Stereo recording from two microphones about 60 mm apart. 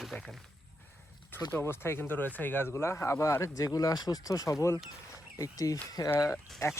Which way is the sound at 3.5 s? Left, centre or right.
Left.